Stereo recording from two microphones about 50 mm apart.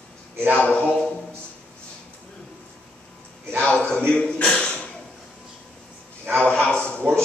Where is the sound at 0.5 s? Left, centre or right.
Left.